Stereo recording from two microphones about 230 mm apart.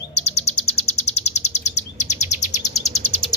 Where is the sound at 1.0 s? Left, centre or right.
Left.